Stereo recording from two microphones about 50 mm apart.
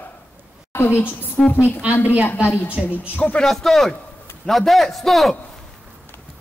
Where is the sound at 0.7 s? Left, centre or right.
Left.